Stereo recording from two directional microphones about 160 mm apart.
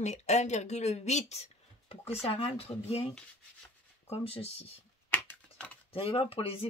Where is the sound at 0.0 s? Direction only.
45° left (ahead or behind).